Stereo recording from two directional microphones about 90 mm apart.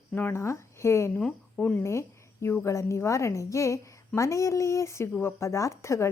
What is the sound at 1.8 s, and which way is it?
A woman's voice, 30° left (ahead or behind).